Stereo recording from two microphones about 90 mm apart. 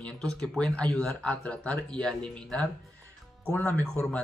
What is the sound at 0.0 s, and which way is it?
Speech, 10° left (ahead or behind).